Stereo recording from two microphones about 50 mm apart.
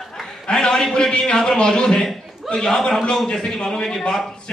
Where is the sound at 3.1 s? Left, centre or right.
Centre.